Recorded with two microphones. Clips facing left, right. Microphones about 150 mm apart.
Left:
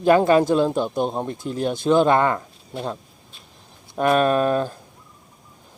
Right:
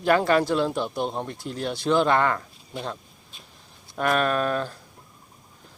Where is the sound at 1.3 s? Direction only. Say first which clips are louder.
Left 5 dB; 50° left (ahead or behind).